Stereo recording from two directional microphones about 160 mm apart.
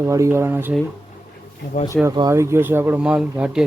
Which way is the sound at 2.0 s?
25° right (ahead or behind).